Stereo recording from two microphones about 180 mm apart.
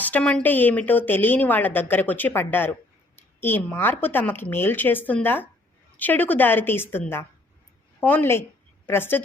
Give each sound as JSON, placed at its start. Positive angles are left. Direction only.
{"t": 0.0, "sound": "a woman's voice", "side_deg": 5}